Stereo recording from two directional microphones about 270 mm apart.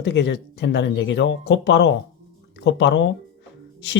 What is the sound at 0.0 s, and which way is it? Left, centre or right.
Speech, left.